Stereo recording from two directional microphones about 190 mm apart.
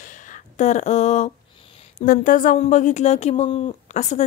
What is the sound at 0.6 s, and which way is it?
Speech, 40° left (ahead or behind).